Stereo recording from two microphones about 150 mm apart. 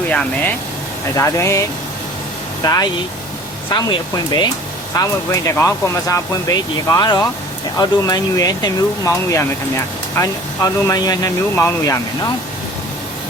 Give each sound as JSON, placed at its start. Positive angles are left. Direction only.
{"t": 0.1, "sound": "speech", "side_deg": 5}
{"t": 1.1, "sound": "speech", "side_deg": 20}
{"t": 2.6, "sound": "speech", "side_deg": 25}